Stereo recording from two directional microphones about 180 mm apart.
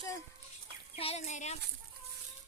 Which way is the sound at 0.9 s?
35° left (ahead or behind).